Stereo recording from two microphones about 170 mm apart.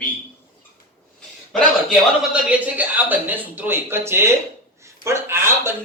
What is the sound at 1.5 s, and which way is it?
Speech, centre (ahead or behind).